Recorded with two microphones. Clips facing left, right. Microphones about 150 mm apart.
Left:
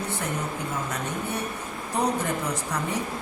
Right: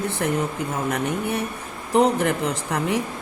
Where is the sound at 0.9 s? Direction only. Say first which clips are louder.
Right 6 dB; 85° right.